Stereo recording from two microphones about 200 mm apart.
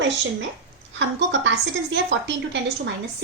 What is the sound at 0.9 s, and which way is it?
A woman's voice, 65° right (ahead or behind).